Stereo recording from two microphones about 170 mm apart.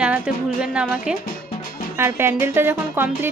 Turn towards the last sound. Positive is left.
turn(degrees=-15)  # may be behind; listen again after turning